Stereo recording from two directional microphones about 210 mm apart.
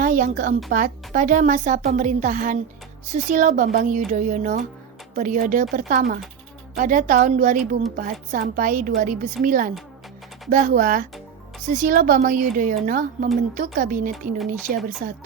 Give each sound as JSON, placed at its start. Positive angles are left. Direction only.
{"t": 0.0, "sound": "a woman's voice", "side_deg": -40}